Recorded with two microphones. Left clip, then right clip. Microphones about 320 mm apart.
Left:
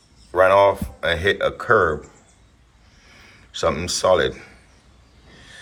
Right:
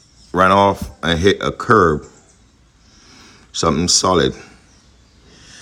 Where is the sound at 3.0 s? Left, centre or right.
Centre.